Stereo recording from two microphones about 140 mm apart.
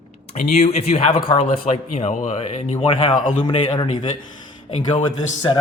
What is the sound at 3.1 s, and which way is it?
Speech, 65° left (ahead or behind).